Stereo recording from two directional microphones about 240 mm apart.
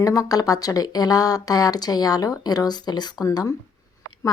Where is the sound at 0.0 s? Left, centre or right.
Centre.